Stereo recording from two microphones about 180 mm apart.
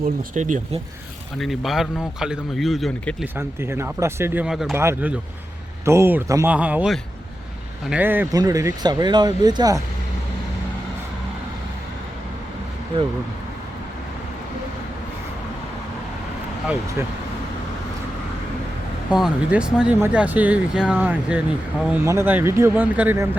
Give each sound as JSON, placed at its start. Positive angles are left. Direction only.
{"t": 0.2, "sound": "speech", "side_deg": -45}
{"t": 1.4, "sound": "a man's voice", "side_deg": 0}
{"t": 3.3, "sound": "speech", "side_deg": -15}
{"t": 4.4, "sound": "a man's voice", "side_deg": 0}
{"t": 4.7, "sound": "speech", "side_deg": -10}
{"t": 19.1, "sound": "speech", "side_deg": -5}